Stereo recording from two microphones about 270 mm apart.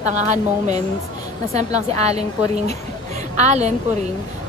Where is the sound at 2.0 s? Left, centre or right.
Right.